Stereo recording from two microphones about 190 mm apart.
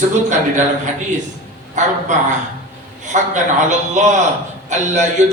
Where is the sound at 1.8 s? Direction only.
40° right (ahead or behind).